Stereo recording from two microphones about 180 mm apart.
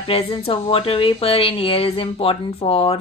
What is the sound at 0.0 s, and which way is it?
Speech, 30° left (ahead or behind).